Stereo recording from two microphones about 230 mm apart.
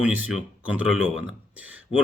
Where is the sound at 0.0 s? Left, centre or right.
Centre.